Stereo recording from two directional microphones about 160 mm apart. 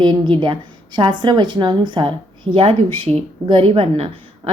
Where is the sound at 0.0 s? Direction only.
30° right (ahead or behind).